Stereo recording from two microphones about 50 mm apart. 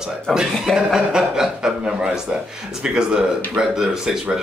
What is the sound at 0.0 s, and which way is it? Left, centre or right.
A man's voice, centre.